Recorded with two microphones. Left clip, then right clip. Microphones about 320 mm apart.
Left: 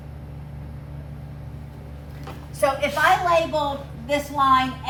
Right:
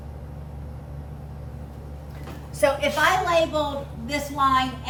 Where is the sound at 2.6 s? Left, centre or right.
Centre.